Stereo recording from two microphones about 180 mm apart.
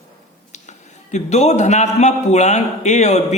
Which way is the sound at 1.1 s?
40° left (ahead or behind).